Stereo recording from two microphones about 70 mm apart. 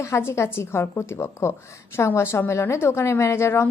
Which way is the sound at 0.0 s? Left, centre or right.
Left.